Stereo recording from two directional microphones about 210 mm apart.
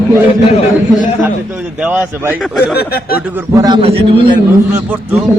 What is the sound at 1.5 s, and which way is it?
Speech, 5° right (ahead or behind).